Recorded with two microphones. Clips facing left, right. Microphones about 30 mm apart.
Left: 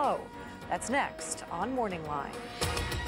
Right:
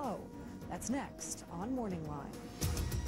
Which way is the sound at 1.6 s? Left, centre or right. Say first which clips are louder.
Left 6 dB; left.